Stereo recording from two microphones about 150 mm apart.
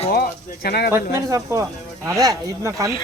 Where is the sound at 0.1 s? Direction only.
90° left.